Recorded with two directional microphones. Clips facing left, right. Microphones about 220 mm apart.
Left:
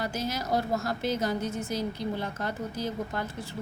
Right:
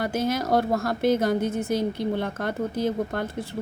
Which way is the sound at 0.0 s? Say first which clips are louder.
Right 7 dB; 55° right (ahead or behind).